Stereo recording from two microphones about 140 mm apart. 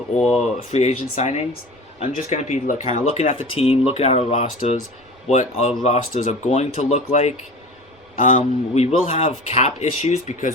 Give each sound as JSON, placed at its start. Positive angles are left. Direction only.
{"t": 0.3, "sound": "speech", "side_deg": 55}
{"t": 3.6, "sound": "speech", "side_deg": 45}